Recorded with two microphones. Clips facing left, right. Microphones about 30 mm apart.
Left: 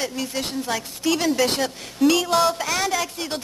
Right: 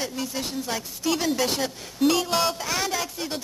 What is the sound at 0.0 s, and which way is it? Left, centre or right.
A woman's voice, left.